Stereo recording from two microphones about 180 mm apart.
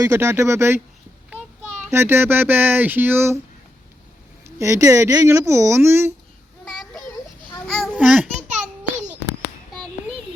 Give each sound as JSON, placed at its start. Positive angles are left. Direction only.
{"t": 0.0, "sound": "speech", "side_deg": -15}
{"t": 1.9, "sound": "speech", "side_deg": -15}
{"t": 4.4, "sound": "speech", "side_deg": -15}
{"t": 7.7, "sound": "a sound", "side_deg": 0}